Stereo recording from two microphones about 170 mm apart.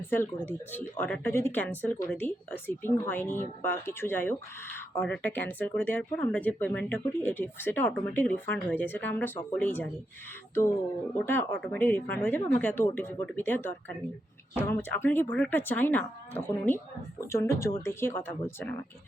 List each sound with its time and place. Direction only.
0.1 s speech: 15° left (ahead or behind)
17.2 s speech: 15° left (ahead or behind)